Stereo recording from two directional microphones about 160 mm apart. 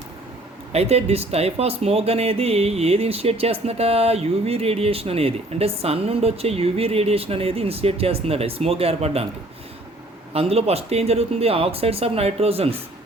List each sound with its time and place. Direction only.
0.7 s speech: 40° right (ahead or behind)
10.3 s speech: 40° right (ahead or behind)